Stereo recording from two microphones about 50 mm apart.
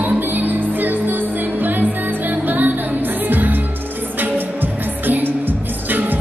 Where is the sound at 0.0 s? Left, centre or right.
Right.